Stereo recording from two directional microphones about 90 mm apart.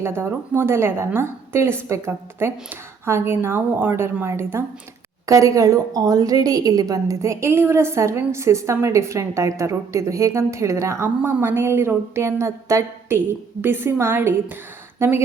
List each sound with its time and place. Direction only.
0.0 s a woman's voice: 25° right (ahead or behind)